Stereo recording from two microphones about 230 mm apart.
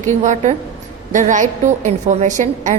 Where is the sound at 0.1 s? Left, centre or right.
Right.